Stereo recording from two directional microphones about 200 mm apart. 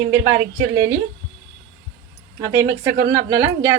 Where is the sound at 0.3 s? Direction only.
50° right (ahead or behind).